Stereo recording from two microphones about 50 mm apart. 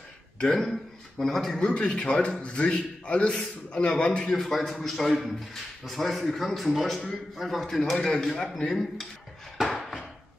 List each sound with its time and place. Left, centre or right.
0.4 s a man's voice: centre
1.7 s a man's voice: left
4.3 s a man's voice: centre
9.6 s chopping: centre